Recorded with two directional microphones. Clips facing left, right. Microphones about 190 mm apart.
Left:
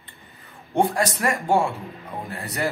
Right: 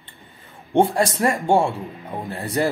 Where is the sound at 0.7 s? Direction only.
30° right (ahead or behind).